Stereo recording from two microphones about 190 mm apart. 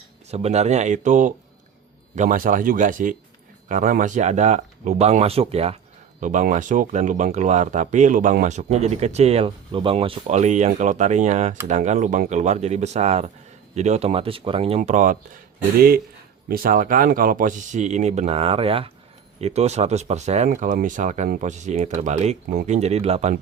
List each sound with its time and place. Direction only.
0.3 s speech: 35° right (ahead or behind)
16.5 s speech: 50° right (ahead or behind); by 23.3 s 35° right (ahead or behind)